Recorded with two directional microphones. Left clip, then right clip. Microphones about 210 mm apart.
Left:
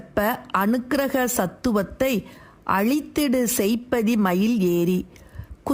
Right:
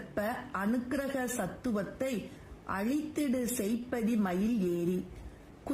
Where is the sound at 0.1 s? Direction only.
40° left (ahead or behind).